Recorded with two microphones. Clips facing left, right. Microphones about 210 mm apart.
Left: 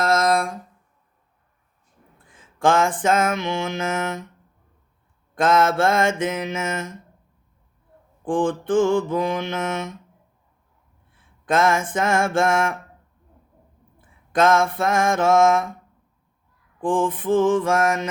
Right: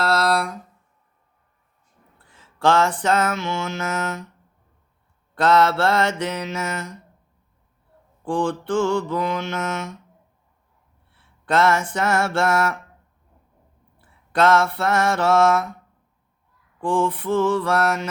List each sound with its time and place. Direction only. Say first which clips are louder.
0.0 s a sound: left 1 dB; 15° left (ahead or behind)
2.1 s a sound: even; 15° left (ahead or behind)
3.0 s mantra: left 1 dB; 15° left (ahead or behind)
5.3 s mantra: right 1 dB; 15° left (ahead or behind)
8.2 s mantra: left 2 dB; 15° left (ahead or behind)
11.1 s a sound: even; 15° left (ahead or behind)
11.9 s mantra: left 1 dB; 15° left (ahead or behind)
14.0 s mantra: even; 15° left (ahead or behind)
16.8 s mantra: even; 15° left (ahead or behind)